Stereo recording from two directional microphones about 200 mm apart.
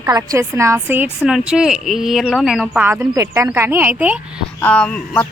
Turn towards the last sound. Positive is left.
turn(degrees=5)  # may be behind; listen again after turning